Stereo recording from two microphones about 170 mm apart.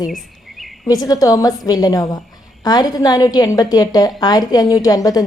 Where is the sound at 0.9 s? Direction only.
20° left (ahead or behind).